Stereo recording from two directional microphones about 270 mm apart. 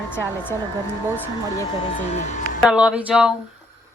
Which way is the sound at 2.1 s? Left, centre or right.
Left.